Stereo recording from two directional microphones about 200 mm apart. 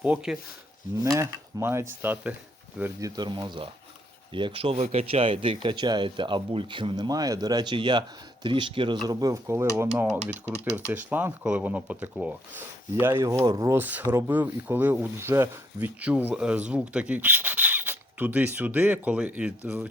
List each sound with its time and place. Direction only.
0.0 s speech: 5° right (ahead or behind)
3.2 s speech: 25° right (ahead or behind)
10.9 s speech: 10° right (ahead or behind)